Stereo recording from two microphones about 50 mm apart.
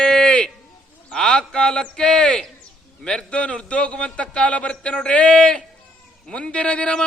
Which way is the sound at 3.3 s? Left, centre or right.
Left.